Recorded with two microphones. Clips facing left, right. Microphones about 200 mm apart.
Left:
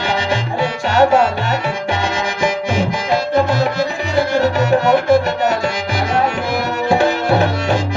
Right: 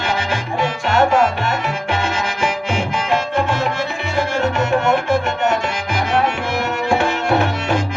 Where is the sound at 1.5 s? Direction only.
35° left (ahead or behind).